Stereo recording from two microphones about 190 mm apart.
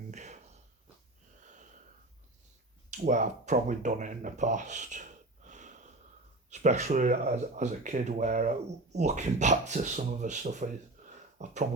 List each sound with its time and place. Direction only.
0.1 s a sound: 40° right (ahead or behind)
2.9 s speech: 40° right (ahead or behind)
5.5 s wheeze: 40° right (ahead or behind)
6.5 s speech: 40° right (ahead or behind)